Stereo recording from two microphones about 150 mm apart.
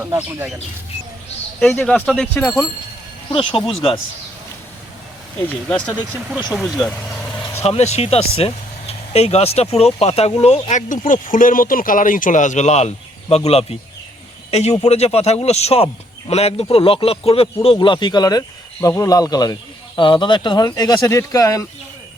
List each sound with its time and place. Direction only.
1.6 s speech: 5° left (ahead or behind)
3.2 s speech: 35° left (ahead or behind)
5.6 s speech: 10° left (ahead or behind)
7.6 s speech: 45° left (ahead or behind); by 21.7 s 20° left (ahead or behind)